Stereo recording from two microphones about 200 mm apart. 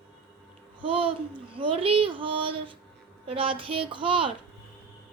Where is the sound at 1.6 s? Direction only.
25° right (ahead or behind).